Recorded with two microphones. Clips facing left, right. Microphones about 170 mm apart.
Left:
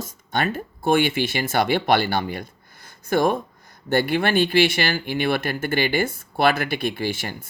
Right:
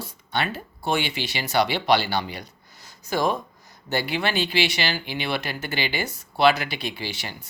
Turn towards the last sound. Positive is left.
turn(degrees=50)  # may be behind; listen again after turning